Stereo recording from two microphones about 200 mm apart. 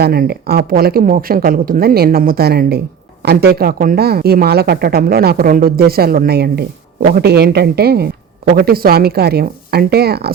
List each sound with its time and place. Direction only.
0.0 s speech: 50° right (ahead or behind)